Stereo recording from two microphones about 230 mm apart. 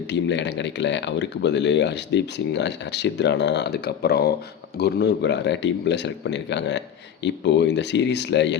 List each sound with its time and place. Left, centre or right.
0.1 s speech: left